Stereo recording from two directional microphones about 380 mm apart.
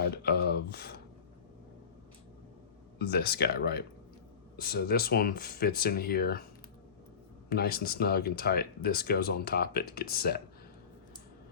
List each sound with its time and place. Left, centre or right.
0.2 s a sound: left
3.0 s speech: left
7.5 s speech: left